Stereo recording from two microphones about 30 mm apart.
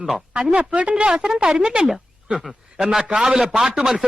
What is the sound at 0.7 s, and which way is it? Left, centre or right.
Speech, right.